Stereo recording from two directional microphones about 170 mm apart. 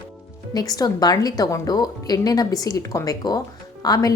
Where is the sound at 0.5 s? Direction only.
20° left (ahead or behind).